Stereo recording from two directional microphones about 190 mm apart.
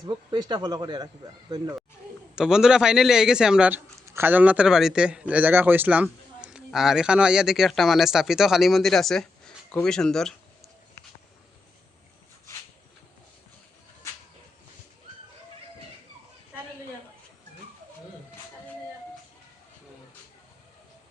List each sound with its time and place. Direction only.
0.0 s speech: 20° right (ahead or behind)
2.3 s a man's voice: 5° right (ahead or behind)